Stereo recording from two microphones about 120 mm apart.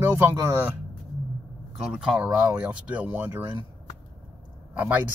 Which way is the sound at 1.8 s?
5° right (ahead or behind).